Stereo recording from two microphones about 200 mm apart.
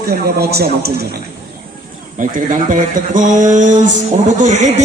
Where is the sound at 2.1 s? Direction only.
40° right (ahead or behind).